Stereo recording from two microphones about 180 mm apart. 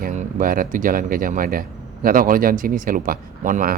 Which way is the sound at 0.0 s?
50° right (ahead or behind).